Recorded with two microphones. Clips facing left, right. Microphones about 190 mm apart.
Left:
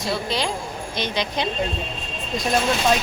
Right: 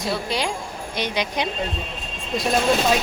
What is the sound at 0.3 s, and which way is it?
Speech, 10° right (ahead or behind).